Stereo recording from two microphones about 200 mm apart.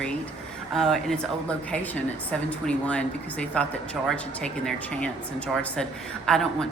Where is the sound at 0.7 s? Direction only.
Centre (ahead or behind).